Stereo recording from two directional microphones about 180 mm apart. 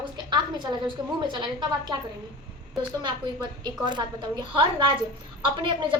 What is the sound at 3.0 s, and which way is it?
A woman's voice, 25° right (ahead or behind).